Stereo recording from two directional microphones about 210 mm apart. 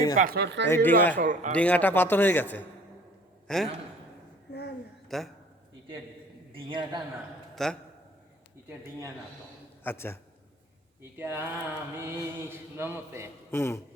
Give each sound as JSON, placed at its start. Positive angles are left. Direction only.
{"t": 0.2, "sound": "speech", "side_deg": -45}
{"t": 0.7, "sound": "a man's voice", "side_deg": 10}
{"t": 1.1, "sound": "a man's voice", "side_deg": -40}
{"t": 1.5, "sound": "a man's voice", "side_deg": 5}
{"t": 5.0, "sound": "a man's voice", "side_deg": 0}
{"t": 6.5, "sound": "a man's voice", "side_deg": -25}
{"t": 7.5, "sound": "a man's voice", "side_deg": 0}
{"t": 9.8, "sound": "a man's voice", "side_deg": 10}
{"t": 11.2, "sound": "mantra", "side_deg": -10}
{"t": 13.5, "sound": "a man's voice", "side_deg": 10}